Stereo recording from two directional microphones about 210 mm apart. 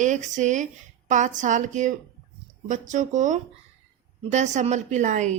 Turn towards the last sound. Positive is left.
turn(degrees=-35)  # may be behind; listen again after turning